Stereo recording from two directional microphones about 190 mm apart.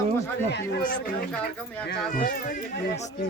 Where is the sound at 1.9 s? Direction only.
50° left (ahead or behind).